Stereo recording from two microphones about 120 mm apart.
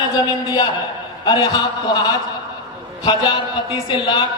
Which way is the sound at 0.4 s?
35° left (ahead or behind).